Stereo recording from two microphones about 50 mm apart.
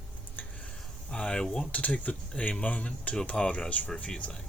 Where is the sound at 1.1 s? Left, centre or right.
Centre.